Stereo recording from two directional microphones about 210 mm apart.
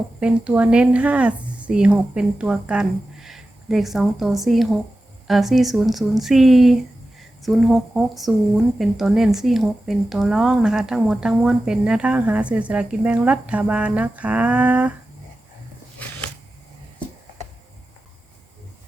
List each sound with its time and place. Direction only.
0.2 s speech: 5° right (ahead or behind)